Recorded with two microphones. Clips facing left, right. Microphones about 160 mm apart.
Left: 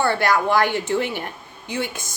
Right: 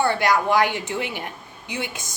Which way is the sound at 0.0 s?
15° right (ahead or behind).